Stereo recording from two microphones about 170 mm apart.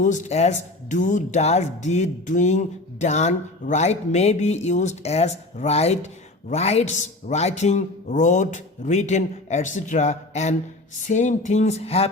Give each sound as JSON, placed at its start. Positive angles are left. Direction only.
{"t": 0.0, "sound": "speech", "side_deg": 45}